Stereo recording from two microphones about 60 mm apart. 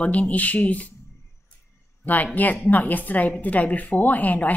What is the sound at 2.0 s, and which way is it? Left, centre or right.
Speech, left.